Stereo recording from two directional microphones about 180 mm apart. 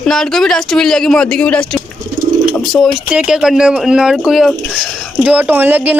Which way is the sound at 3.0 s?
5° right (ahead or behind).